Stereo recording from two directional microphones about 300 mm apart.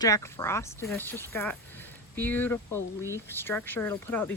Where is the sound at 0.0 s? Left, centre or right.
Centre.